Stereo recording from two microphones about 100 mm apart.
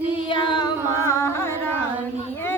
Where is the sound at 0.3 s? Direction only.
50° left (ahead or behind).